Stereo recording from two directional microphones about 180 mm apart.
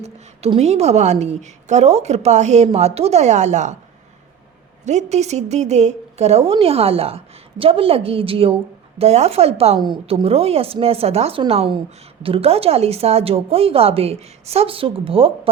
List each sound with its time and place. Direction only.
0.0 s a woman's voice: 35° right (ahead or behind)
4.9 s a woman's voice: 40° right (ahead or behind)